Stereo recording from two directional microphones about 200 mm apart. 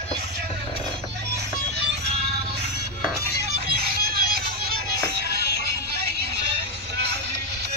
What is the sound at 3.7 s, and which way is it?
Music, 50° right (ahead or behind).